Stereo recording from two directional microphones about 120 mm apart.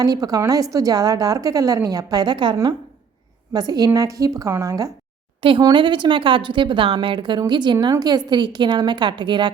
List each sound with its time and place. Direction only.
0.0 s a woman's voice: 30° right (ahead or behind)
5.4 s a woman's voice: 45° right (ahead or behind)